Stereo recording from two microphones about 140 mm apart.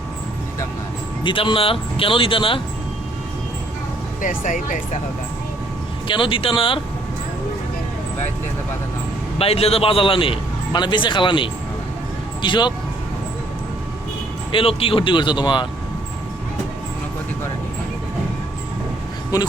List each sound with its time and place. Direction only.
1.2 s a man's voice: 35° left (ahead or behind)
4.2 s speech: 70° left (ahead or behind)
6.1 s a man's voice: 35° left (ahead or behind)
9.4 s a man's voice: 45° left (ahead or behind)
14.5 s a man's voice: 40° left (ahead or behind)